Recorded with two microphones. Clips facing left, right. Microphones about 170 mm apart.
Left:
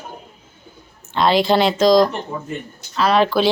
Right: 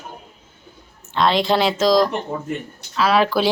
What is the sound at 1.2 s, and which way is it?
A woman's voice, centre (ahead or behind).